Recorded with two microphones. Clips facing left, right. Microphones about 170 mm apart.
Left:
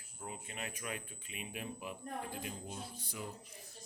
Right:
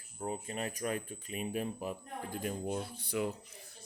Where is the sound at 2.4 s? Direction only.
55° right (ahead or behind).